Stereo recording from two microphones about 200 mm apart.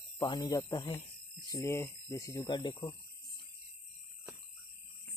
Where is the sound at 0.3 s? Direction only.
20° left (ahead or behind).